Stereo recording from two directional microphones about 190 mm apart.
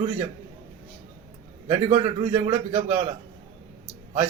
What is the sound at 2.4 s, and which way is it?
Speech, 30° right (ahead or behind).